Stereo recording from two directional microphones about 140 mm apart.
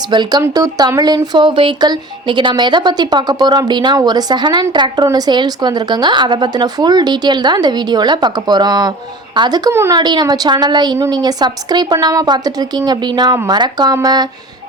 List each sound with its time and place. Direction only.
0.1 s speech: 30° right (ahead or behind)